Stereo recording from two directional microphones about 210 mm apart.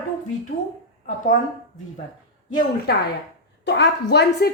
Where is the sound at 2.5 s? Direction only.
40° left (ahead or behind).